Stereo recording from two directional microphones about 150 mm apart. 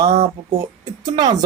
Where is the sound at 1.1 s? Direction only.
25° right (ahead or behind).